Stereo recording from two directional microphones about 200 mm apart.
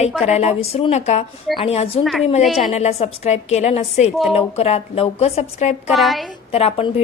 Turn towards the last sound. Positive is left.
turn(degrees=30)  # may be behind; listen again after turning